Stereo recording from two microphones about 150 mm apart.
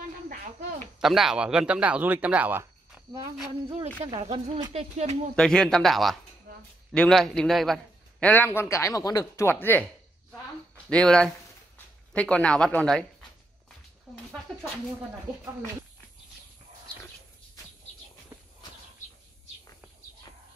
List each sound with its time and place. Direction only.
0.3 s snake: 65° right (ahead or behind)
1.0 s speech: centre (ahead or behind)
3.6 s speech: 45° right (ahead or behind)
4.1 s speech: 35° right (ahead or behind)
4.7 s speech: 45° right (ahead or behind)
5.3 s a man's voice: 5° left (ahead or behind)
10.9 s speech: 5° left (ahead or behind)
18.3 s walk: 20° right (ahead or behind)